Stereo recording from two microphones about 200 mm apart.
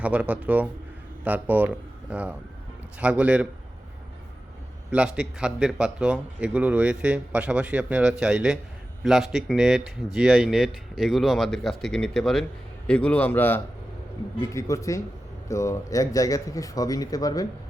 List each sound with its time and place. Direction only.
0.0 s speech: 5° right (ahead or behind)
4.9 s a man's voice: 5° right (ahead or behind); by 17.4 s 20° left (ahead or behind)